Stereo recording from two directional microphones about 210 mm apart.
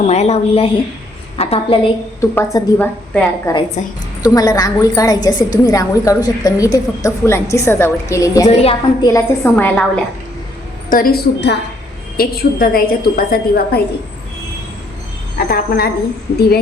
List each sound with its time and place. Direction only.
0.0 s a woman's voice: 30° left (ahead or behind)
2.3 s a woman's voice: 15° left (ahead or behind)
3.8 s a woman's voice: 35° left (ahead or behind)
4.2 s a woman's voice: 15° left (ahead or behind)
9.4 s a woman's voice: 10° left (ahead or behind)
10.8 s a woman's voice: 40° left (ahead or behind)
15.4 s a woman's voice: 45° left (ahead or behind)